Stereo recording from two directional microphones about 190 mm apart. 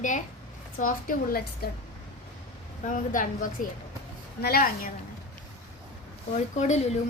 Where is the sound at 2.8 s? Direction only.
45° left (ahead or behind).